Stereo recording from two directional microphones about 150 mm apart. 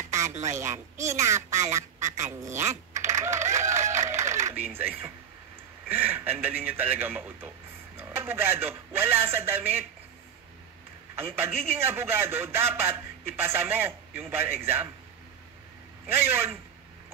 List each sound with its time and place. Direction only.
0.9 s speech: 20° right (ahead or behind)
2.1 s quack: 50° right (ahead or behind)
2.7 s typing: 20° right (ahead or behind)
3.4 s a sound: 20° right (ahead or behind)
4.2 s coin: 20° right (ahead or behind)
5.9 s a man's voice: 15° right (ahead or behind)
11.1 s speech: 15° right (ahead or behind)
16.1 s speech: 15° right (ahead or behind)